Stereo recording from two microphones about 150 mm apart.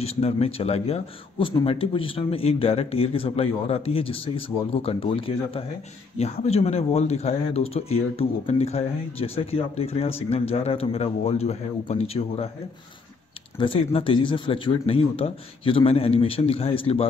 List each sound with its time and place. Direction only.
0.0 s speech: 40° left (ahead or behind)
13.6 s speech: 35° left (ahead or behind)